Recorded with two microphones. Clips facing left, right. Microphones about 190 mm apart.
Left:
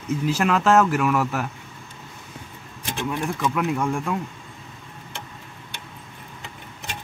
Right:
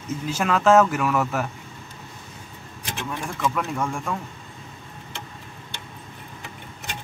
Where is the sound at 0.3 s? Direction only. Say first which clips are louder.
Right 1 dB; centre (ahead or behind).